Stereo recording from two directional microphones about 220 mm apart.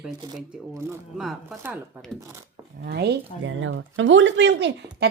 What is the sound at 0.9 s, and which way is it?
Speech, centre (ahead or behind).